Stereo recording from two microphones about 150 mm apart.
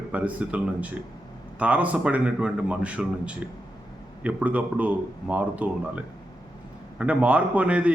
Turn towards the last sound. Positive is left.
turn(degrees=-10)  # may be behind; listen again after turning